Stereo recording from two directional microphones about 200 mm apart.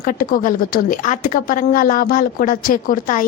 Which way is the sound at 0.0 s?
45° left (ahead or behind).